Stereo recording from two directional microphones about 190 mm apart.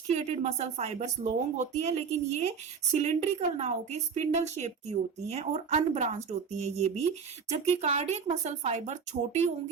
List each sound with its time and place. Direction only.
0.1 s a woman's voice: 35° right (ahead or behind)